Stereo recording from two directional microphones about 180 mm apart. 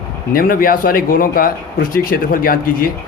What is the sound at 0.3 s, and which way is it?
Speech, 50° left (ahead or behind).